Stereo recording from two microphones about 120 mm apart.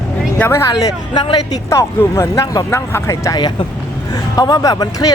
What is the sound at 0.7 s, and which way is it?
Speech, 35° left (ahead or behind).